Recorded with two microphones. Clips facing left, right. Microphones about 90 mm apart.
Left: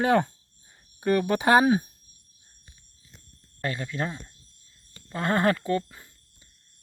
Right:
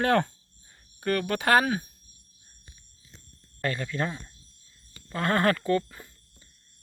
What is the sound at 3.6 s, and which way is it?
Speech, 10° left (ahead or behind).